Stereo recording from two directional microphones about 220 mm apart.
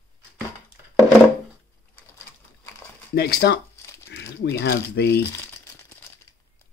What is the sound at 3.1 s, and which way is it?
Speech, 45° left (ahead or behind).